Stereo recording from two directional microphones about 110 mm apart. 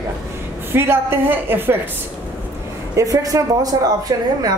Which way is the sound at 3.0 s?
30° right (ahead or behind).